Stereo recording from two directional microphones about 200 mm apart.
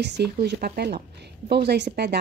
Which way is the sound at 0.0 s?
55° right (ahead or behind).